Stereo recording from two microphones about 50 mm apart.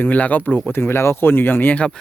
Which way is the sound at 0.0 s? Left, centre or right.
Left.